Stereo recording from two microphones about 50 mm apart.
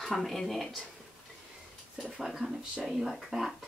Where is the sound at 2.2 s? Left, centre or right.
Centre.